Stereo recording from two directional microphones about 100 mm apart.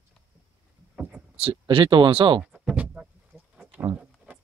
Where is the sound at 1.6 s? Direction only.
55° right (ahead or behind).